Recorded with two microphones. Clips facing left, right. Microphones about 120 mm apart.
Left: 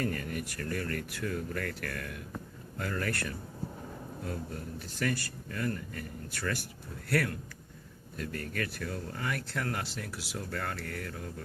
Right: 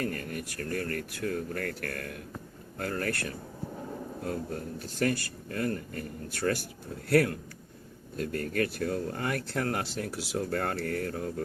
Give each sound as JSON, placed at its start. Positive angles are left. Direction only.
{"t": 0.1, "sound": "speech", "side_deg": -40}
{"t": 4.3, "sound": "speech", "side_deg": -40}